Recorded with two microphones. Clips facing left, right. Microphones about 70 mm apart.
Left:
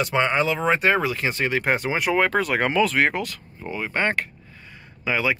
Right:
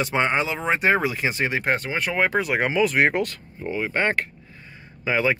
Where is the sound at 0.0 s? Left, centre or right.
Right.